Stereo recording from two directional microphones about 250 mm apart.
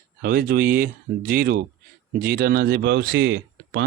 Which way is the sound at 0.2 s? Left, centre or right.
Right.